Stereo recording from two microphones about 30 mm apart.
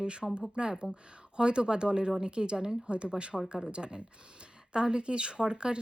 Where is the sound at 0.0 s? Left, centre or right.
Right.